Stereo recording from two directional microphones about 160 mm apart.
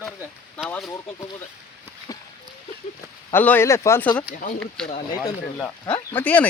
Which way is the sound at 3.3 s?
10° left (ahead or behind).